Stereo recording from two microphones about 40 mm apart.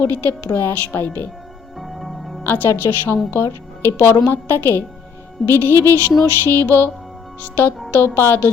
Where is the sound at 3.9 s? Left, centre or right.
Left.